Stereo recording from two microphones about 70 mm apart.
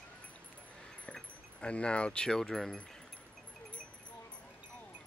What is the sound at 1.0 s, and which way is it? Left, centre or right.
Speech, centre.